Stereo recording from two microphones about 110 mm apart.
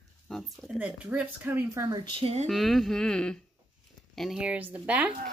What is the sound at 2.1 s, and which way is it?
Speech, 65° right (ahead or behind).